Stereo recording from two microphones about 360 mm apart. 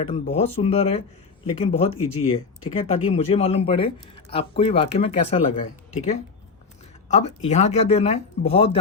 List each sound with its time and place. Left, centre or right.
0.0 s speech: centre